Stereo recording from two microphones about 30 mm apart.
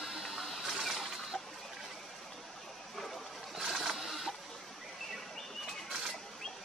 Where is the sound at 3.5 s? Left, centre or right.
Centre.